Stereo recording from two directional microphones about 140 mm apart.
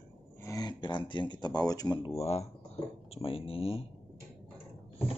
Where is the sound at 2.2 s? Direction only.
50° left (ahead or behind).